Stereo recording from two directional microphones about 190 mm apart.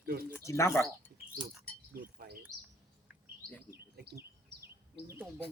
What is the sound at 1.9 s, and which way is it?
Chink, 50° right (ahead or behind).